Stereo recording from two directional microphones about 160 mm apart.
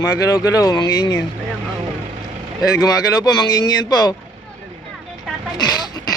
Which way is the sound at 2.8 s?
25° left (ahead or behind).